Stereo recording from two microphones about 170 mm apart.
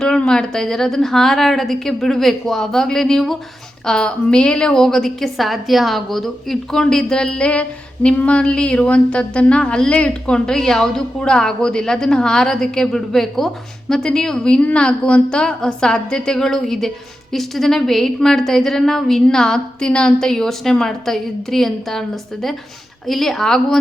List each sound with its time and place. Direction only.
0.0 s a woman's voice: 5° left (ahead or behind)